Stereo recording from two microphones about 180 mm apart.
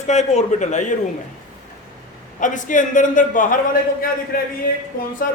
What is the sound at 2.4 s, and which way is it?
A man's voice, 45° left (ahead or behind).